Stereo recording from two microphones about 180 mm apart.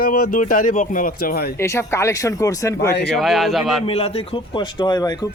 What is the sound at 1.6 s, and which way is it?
Speech, 15° left (ahead or behind).